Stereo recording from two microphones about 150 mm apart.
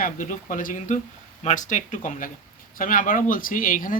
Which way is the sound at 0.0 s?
65° left (ahead or behind).